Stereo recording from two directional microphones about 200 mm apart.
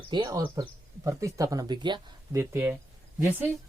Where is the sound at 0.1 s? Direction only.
20° right (ahead or behind).